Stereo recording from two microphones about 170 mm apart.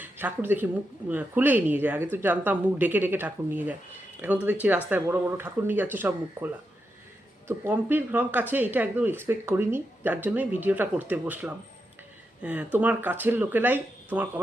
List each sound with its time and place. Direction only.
0.0 s speech: 10° right (ahead or behind)